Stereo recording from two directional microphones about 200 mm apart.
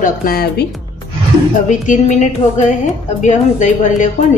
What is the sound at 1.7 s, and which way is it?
A woman's voice, 40° left (ahead or behind).